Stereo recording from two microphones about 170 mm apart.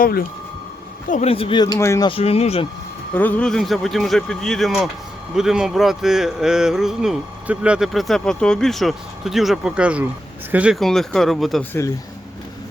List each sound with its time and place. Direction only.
0.0 s speech: 60° left (ahead or behind)
1.1 s speech: 35° left (ahead or behind); by 2.0 s 20° left (ahead or behind)
2.0 s speech: 35° left (ahead or behind)
3.2 s speech: 10° left (ahead or behind)